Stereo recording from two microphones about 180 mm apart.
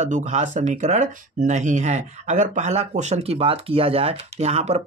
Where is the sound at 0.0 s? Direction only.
40° right (ahead or behind).